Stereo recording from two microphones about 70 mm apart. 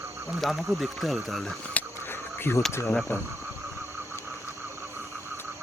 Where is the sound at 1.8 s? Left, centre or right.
Left.